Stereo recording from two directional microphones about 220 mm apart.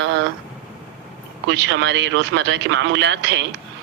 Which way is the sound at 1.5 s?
55° right (ahead or behind).